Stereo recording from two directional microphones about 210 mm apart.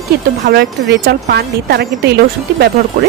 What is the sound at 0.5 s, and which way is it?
Speech, 50° right (ahead or behind).